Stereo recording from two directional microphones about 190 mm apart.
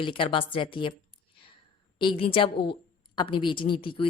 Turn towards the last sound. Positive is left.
turn(degrees=25)  # may be behind; listen again after turning